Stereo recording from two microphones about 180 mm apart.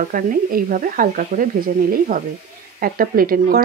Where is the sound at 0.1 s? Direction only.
50° right (ahead or behind).